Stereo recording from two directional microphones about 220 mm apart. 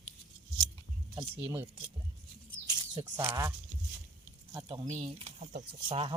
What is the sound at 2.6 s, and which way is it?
Speech, 20° right (ahead or behind).